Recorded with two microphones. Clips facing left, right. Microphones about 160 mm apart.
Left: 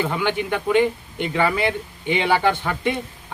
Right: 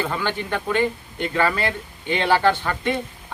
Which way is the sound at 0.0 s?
15° left (ahead or behind).